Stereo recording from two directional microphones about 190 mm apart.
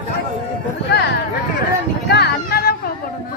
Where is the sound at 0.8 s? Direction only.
60° left (ahead or behind).